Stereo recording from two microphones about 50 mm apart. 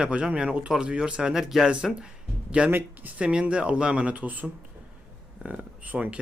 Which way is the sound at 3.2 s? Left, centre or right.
Right.